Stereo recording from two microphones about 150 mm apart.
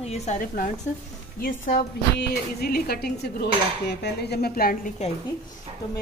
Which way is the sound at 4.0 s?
90° left.